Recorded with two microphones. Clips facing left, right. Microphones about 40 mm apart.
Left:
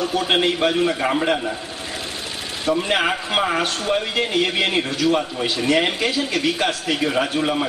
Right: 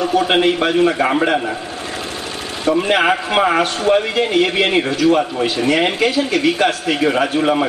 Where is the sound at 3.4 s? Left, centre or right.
Centre.